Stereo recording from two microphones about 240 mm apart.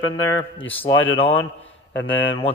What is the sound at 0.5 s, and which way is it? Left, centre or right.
Speech, centre.